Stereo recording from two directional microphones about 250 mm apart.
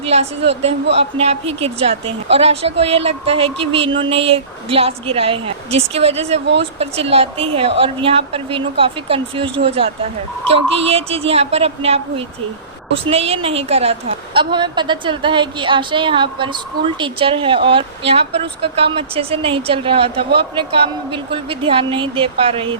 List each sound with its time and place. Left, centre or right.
0.0 s a woman's voice: right